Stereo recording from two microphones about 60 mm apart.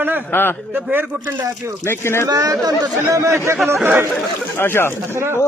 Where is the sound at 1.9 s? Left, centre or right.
Left.